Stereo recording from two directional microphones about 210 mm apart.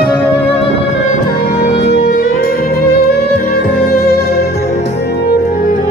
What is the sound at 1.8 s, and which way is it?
Music, 50° left (ahead or behind).